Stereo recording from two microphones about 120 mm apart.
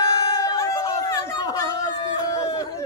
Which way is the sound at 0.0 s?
30° left (ahead or behind).